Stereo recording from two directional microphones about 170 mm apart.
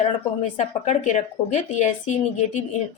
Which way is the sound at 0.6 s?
45° left (ahead or behind).